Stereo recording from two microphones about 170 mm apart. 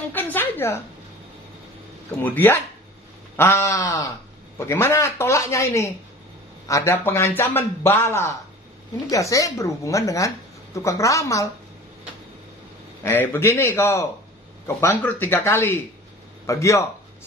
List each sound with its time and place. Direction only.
0.1 s a woman's voice: 10° left (ahead or behind)
2.2 s a man's voice: 10° left (ahead or behind)
13.0 s a man's voice: 10° left (ahead or behind)